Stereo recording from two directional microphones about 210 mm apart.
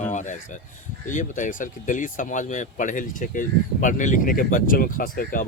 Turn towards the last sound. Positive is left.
turn(degrees=40)  # may be behind; listen again after turning